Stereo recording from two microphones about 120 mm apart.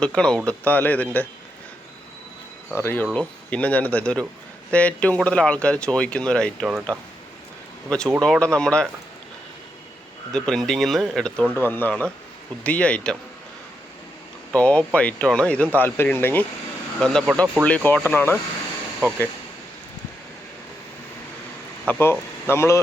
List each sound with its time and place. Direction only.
0.0 s speech: 10° left (ahead or behind)
2.7 s speech: 20° left (ahead or behind)
10.3 s speech: 5° left (ahead or behind)
11.5 s speech: 15° left (ahead or behind)
14.5 s speech: 10° left (ahead or behind)
17.0 s speech: 5° left (ahead or behind)
21.8 s speech: 15° left (ahead or behind)